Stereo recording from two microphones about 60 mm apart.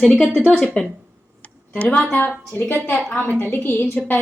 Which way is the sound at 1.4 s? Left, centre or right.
Left.